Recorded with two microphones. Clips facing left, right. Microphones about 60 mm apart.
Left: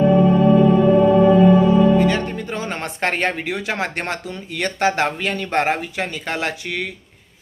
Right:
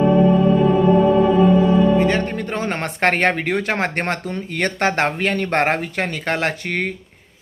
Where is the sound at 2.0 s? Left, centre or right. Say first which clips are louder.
Even; right.